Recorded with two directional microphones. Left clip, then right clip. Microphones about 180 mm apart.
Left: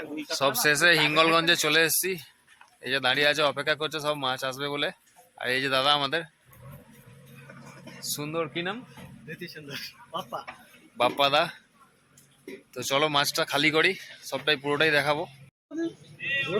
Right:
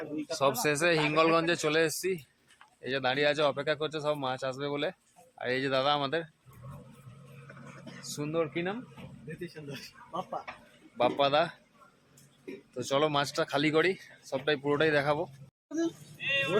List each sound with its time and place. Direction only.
0.3 s speech: centre (ahead or behind)
7.4 s a sound: 40° left (ahead or behind)
8.1 s speech: 5° left (ahead or behind)
9.4 s a man's voice: 20° right (ahead or behind)
10.5 s a man's voice: 50° left (ahead or behind)
10.9 s speech: 15° left (ahead or behind)
12.9 s speech: 5° left (ahead or behind)
16.0 s a sound: centre (ahead or behind)